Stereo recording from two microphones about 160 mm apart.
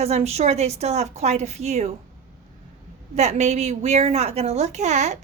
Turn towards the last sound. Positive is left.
turn(degrees=-45)  # may be behind; listen again after turning